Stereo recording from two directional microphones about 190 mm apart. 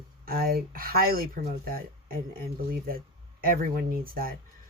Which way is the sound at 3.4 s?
50° right (ahead or behind).